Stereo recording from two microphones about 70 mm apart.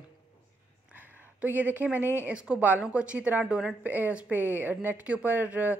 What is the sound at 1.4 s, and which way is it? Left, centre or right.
A woman's voice, right.